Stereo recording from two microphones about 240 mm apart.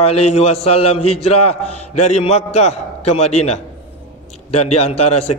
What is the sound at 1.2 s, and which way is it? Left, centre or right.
Speech, left.